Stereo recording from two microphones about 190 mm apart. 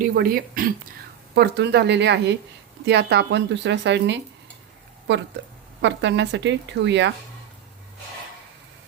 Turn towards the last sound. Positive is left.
turn(degrees=-70)  # may be behind; listen again after turning